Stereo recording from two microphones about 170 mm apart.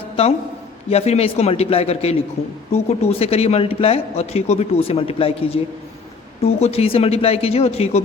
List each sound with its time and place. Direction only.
0.9 s a man's voice: 40° left (ahead or behind)